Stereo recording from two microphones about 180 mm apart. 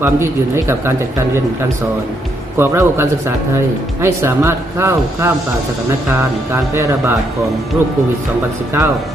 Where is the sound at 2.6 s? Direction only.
15° right (ahead or behind).